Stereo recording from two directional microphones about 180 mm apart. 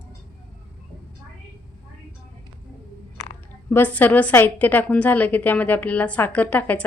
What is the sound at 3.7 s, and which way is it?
A woman's voice, 10° left (ahead or behind).